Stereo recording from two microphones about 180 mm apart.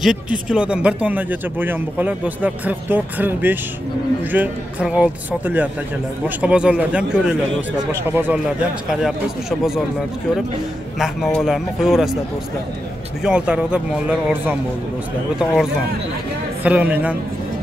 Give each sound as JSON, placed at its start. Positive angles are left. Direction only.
{"t": 0.0, "sound": "a man's voice", "side_deg": -5}
{"t": 11.0, "sound": "a man's voice", "side_deg": 0}
{"t": 13.2, "sound": "a man's voice", "side_deg": -5}